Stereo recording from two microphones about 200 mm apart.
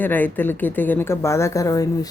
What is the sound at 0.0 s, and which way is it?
Speech, 10° left (ahead or behind).